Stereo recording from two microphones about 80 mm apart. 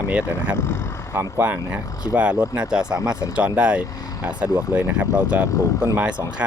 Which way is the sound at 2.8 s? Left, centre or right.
Right.